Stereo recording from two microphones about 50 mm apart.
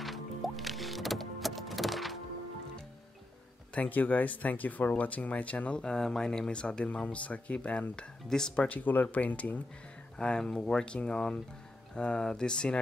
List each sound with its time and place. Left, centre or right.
0.0 s music: centre
3.7 s speech: left
5.8 s speech: centre
8.6 s speech: left
10.1 s speech: centre